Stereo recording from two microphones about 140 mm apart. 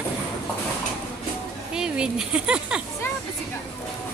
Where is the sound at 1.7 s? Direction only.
5° right (ahead or behind).